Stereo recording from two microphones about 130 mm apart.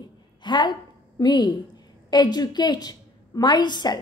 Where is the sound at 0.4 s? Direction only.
35° left (ahead or behind).